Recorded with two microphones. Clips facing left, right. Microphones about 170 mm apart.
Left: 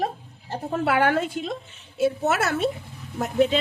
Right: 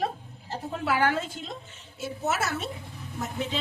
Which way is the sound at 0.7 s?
60° left (ahead or behind).